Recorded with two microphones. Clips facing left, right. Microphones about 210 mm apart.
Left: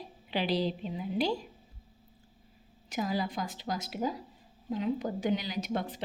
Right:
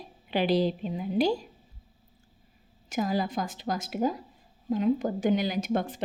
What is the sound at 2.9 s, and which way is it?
A woman's voice, 45° right (ahead or behind).